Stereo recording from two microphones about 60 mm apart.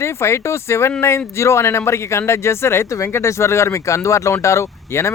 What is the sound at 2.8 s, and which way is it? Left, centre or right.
Speech, left.